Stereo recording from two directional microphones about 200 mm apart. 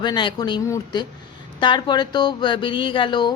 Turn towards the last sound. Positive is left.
turn(degrees=25)  # may be behind; listen again after turning